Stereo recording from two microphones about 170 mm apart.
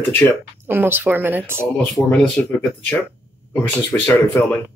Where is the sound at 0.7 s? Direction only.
10° right (ahead or behind).